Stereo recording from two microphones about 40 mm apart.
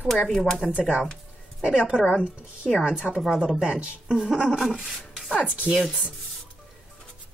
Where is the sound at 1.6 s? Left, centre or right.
Centre.